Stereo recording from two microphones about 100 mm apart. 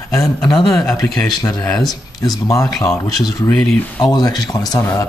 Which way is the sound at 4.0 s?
45° left (ahead or behind).